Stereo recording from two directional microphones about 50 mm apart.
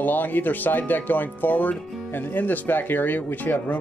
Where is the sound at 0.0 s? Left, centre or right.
Left.